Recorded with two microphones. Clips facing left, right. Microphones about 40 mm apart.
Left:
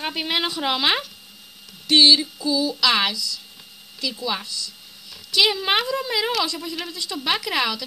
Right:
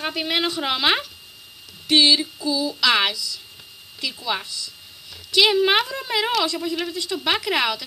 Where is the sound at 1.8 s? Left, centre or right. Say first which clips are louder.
Left 1 dB; right.